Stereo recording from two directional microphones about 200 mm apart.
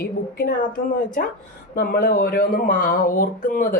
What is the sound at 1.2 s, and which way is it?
Speech, 45° left (ahead or behind).